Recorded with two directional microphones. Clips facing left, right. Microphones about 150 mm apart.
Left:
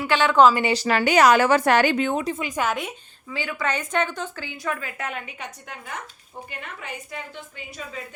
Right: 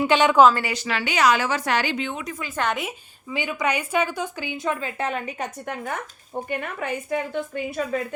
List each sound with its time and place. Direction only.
0.0 s a woman's voice: 20° right (ahead or behind)
0.7 s a woman's voice: 40° left (ahead or behind)
2.2 s a woman's voice: 25° left (ahead or behind)
2.5 s a woman's voice: 5° left (ahead or behind)
3.2 s a woman's voice: 20° right (ahead or behind); by 5.5 s 35° right (ahead or behind)
6.3 s a woman's voice: 60° right (ahead or behind)